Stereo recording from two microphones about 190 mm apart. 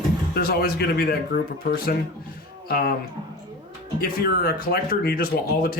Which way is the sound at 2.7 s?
50° left (ahead or behind).